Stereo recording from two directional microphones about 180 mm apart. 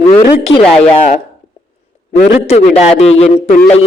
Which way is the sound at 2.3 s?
35° left (ahead or behind).